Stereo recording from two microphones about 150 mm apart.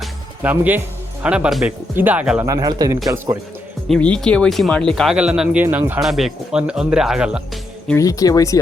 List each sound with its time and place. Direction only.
0.4 s speech: 10° right (ahead or behind)
2.4 s speech: 25° right (ahead or behind)
3.8 s speech: 5° left (ahead or behind); by 6.0 s 15° right (ahead or behind)
6.0 s speech: centre (ahead or behind)
7.9 s speech: 25° left (ahead or behind)